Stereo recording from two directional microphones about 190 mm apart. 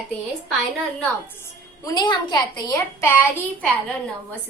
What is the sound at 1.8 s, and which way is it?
A woman's voice, 20° left (ahead or behind).